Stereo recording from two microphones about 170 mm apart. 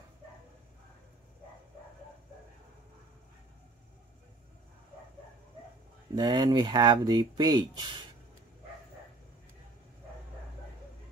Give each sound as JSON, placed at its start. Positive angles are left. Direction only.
{"t": 6.1, "sound": "speech", "side_deg": -25}